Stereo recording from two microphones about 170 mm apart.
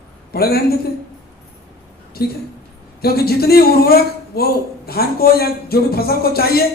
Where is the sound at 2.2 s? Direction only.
65° left (ahead or behind).